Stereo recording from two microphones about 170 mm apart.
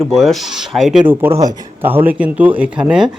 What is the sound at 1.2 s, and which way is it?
Speech, 20° right (ahead or behind).